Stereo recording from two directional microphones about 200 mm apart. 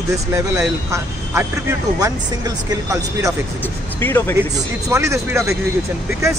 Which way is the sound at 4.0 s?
10° left (ahead or behind).